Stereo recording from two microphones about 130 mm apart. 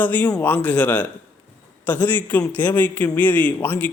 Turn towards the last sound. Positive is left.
turn(degrees=15)  # may be behind; listen again after turning